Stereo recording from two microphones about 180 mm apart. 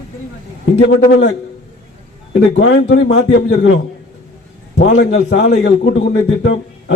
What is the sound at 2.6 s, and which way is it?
Speech, 80° left.